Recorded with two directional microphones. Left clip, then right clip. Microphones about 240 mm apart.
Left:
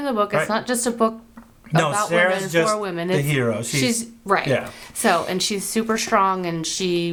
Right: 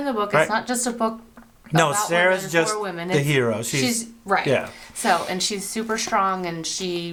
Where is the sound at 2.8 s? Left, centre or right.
Left.